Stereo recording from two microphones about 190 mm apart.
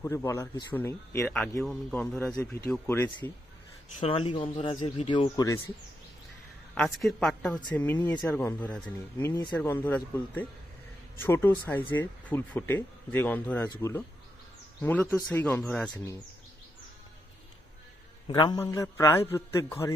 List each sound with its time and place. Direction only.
0.0 s a woman's voice: 15° left (ahead or behind)
4.0 s speech: 30° left (ahead or behind)
5.3 s speech: 15° left (ahead or behind)
6.7 s a woman's voice: 5° left (ahead or behind)
9.3 s speech: 25° left (ahead or behind)
9.6 s a woman's voice: 10° left (ahead or behind)
18.2 s speech: 20° left (ahead or behind)